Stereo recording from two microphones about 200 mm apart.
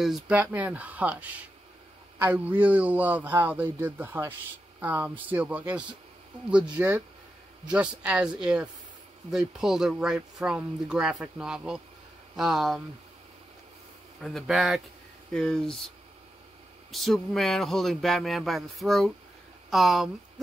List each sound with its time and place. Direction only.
0.0 s speech: 5° right (ahead or behind)
14.2 s speech: centre (ahead or behind)
16.9 s speech: centre (ahead or behind)